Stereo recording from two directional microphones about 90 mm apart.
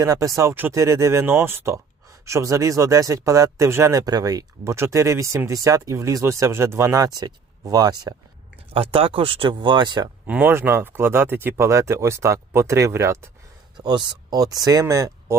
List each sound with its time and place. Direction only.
0.0 s speech: 40° right (ahead or behind)
8.7 s speech: 90° right; by 10.0 s 60° right (ahead or behind)
10.2 s speech: 20° right (ahead or behind)
13.7 s speech: 55° right (ahead or behind); by 15.4 s 35° right (ahead or behind)